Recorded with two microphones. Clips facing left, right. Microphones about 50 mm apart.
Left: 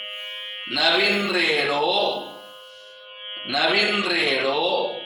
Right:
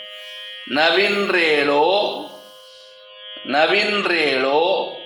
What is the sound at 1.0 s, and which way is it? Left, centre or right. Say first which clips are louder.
Speech: right 4 dB; right.